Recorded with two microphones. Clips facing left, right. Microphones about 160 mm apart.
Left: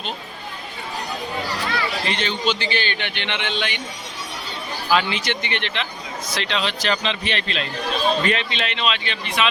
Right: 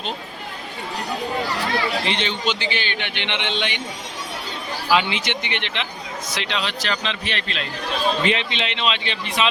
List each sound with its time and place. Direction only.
2.0 s a man's voice: 25° right (ahead or behind)
4.9 s speech: 20° right (ahead or behind); by 7.6 s centre (ahead or behind)
8.2 s a man's voice: 20° right (ahead or behind)